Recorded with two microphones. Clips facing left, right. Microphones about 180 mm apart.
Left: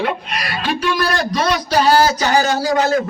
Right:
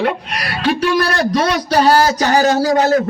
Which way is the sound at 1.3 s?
55° right (ahead or behind).